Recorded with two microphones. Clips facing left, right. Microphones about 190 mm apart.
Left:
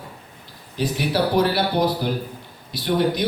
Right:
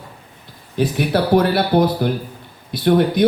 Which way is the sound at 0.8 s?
55° right (ahead or behind).